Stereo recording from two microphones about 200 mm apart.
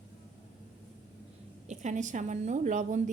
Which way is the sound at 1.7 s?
35° right (ahead or behind).